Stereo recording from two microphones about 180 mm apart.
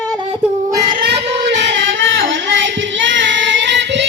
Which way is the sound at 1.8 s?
90° right.